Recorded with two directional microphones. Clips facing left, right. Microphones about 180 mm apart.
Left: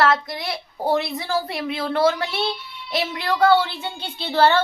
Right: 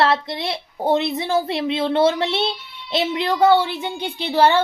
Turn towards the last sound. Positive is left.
turn(degrees=-15)  # may be behind; listen again after turning